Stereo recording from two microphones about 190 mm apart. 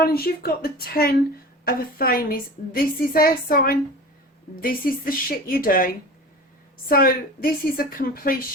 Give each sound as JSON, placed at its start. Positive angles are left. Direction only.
{"t": 0.0, "sound": "a woman's voice", "side_deg": 55}